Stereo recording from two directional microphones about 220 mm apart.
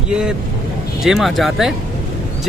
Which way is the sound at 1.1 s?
Centre (ahead or behind).